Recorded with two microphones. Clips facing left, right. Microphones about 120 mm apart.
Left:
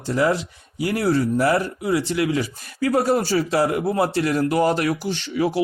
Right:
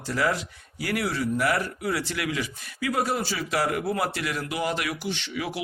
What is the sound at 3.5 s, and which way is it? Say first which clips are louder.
A man's voice: left 3 dB; 25° left (ahead or behind).